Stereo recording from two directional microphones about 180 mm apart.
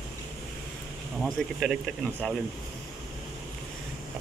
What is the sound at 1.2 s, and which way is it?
Speech, centre (ahead or behind).